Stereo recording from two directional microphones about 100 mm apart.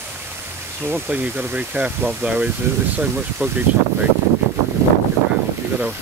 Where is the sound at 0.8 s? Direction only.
15° right (ahead or behind).